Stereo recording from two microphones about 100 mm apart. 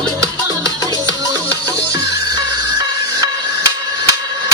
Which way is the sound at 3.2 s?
35° right (ahead or behind).